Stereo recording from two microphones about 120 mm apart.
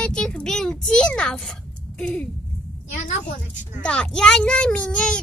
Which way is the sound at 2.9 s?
90° left.